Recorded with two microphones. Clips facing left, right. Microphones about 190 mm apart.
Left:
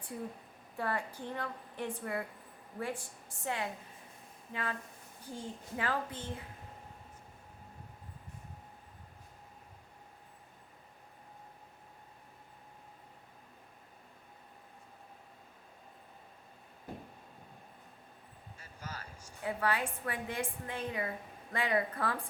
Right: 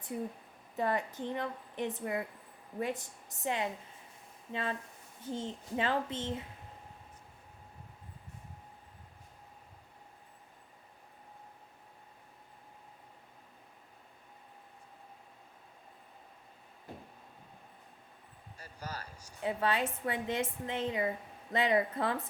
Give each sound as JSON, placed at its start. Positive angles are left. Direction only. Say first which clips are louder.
{"t": 0.8, "sound": "a woman's voice", "louder": "right 4 dB", "side_deg": -20}
{"t": 18.6, "sound": "a sound", "louder": "right 3 dB", "side_deg": -40}
{"t": 19.4, "sound": "a woman's voice", "louder": "right 2 dB", "side_deg": -25}